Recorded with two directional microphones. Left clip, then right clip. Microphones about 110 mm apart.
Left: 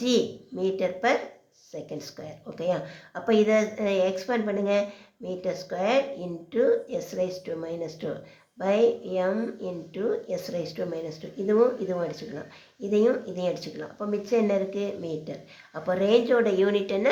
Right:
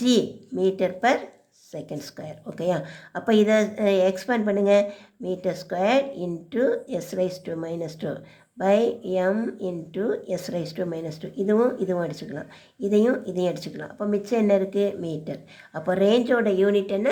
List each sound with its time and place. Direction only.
0.0 s speech: 40° right (ahead or behind)